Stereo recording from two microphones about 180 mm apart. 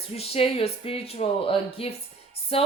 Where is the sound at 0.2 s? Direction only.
35° left (ahead or behind).